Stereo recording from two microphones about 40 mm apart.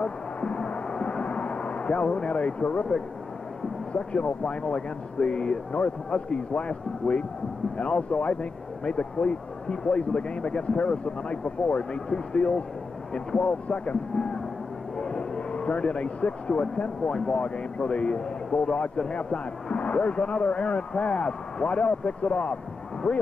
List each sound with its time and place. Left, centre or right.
0.0 s music: left
1.2 s vehicle: left
2.2 s speech: left
3.9 s speech: left
14.1 s music: left
15.0 s speech: left